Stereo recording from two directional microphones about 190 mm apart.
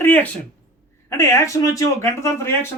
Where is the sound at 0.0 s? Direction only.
10° left (ahead or behind).